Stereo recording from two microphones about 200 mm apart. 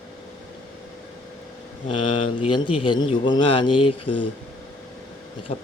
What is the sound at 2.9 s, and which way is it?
Speech, 20° left (ahead or behind).